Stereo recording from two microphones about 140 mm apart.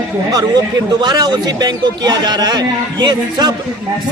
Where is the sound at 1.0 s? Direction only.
30° right (ahead or behind).